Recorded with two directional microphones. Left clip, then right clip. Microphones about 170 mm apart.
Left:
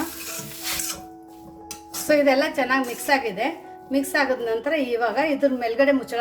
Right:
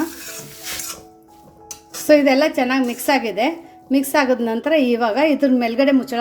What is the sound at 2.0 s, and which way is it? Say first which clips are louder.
A woman's voice: right 5 dB; 35° right (ahead or behind).